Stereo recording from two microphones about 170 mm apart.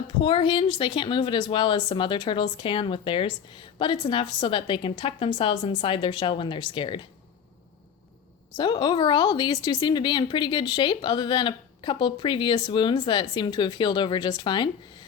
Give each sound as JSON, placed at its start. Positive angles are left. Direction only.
{"t": 0.2, "sound": "a woman's voice", "side_deg": 30}
{"t": 8.5, "sound": "a woman's voice", "side_deg": 25}